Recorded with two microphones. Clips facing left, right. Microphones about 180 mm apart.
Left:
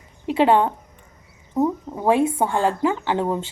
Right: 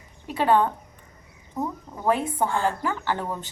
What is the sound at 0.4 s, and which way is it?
Speech, 25° left (ahead or behind).